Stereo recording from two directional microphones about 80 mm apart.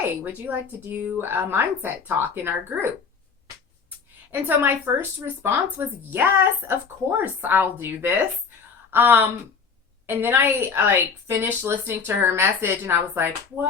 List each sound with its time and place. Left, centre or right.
0.0 s a woman's voice: right
4.3 s a woman's voice: right